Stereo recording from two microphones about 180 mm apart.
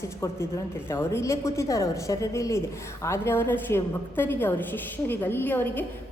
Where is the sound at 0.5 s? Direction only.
15° left (ahead or behind).